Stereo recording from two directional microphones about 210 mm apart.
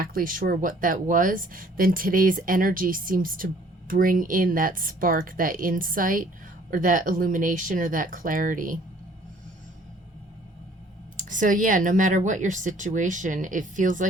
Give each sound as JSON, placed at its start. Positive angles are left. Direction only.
{"t": 0.0, "sound": "speech", "side_deg": -45}
{"t": 11.2, "sound": "speech", "side_deg": -40}